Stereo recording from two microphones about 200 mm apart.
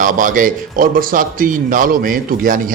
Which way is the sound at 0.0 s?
40° right (ahead or behind).